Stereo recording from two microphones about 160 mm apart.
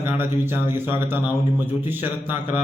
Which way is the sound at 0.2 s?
15° right (ahead or behind).